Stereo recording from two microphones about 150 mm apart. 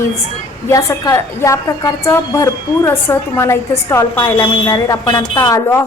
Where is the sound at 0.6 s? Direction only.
20° left (ahead or behind).